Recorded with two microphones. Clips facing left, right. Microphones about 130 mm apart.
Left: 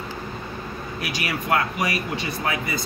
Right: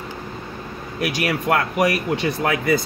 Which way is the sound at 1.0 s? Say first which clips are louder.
Right 7 dB; 60° right (ahead or behind).